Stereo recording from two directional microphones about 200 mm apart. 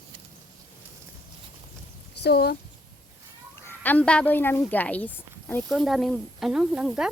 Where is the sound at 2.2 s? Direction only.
55° left (ahead or behind).